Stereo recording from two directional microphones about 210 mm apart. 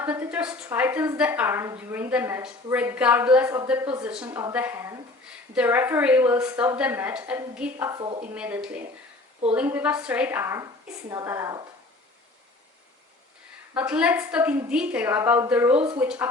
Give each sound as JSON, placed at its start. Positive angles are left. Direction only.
{"t": 0.0, "sound": "a woman's voice", "side_deg": -10}
{"t": 8.3, "sound": "a woman's voice", "side_deg": -5}
{"t": 13.7, "sound": "a woman's voice", "side_deg": -5}